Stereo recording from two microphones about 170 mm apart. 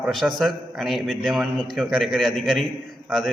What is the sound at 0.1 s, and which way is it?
A man's voice, centre (ahead or behind).